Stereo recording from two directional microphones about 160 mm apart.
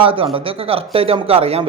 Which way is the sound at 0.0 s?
35° right (ahead or behind).